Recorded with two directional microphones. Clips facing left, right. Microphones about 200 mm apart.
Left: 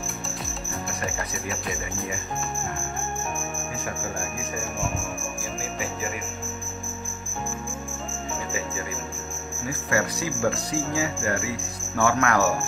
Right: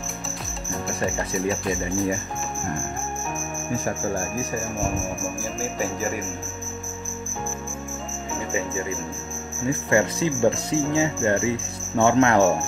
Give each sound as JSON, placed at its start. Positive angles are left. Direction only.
{"t": 1.1, "sound": "speech", "side_deg": -25}
{"t": 9.7, "sound": "speech", "side_deg": -25}